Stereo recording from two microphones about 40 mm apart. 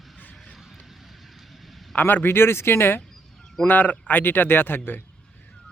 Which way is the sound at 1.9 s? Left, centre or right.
Left.